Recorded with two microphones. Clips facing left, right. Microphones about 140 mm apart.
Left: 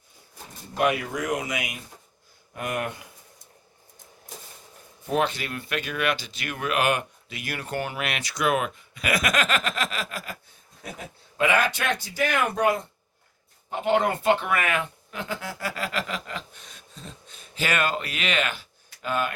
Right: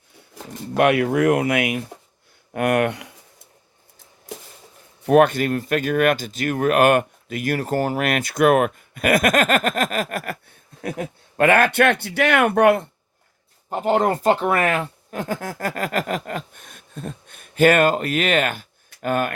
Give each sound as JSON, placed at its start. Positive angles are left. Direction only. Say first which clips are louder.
{"t": 0.3, "sound": "speech", "louder": "right 7 dB", "side_deg": -75}
{"t": 5.0, "sound": "speech", "louder": "right 11 dB", "side_deg": -55}
{"t": 13.7, "sound": "speech", "louder": "right 4 dB", "side_deg": -40}